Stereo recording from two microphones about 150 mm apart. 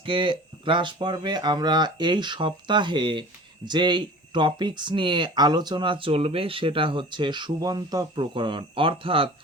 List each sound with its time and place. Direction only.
0.0 s speech: 35° right (ahead or behind)